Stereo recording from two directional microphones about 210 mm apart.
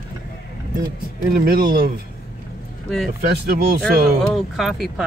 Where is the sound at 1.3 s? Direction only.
45° right (ahead or behind).